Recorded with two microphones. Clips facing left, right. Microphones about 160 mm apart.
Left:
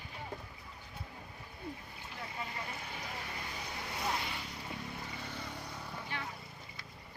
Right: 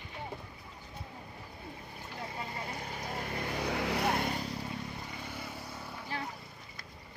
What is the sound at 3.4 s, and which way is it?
Vehicle, 70° right (ahead or behind).